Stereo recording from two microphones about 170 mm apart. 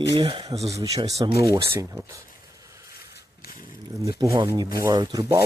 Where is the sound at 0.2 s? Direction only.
30° right (ahead or behind).